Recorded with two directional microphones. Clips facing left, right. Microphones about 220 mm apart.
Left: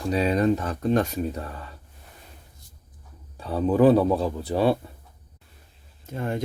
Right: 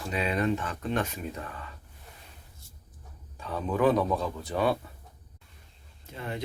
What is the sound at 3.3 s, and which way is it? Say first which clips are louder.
Speech: left 8 dB; 35° left (ahead or behind).